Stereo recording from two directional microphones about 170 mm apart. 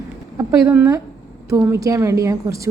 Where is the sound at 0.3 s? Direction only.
15° right (ahead or behind).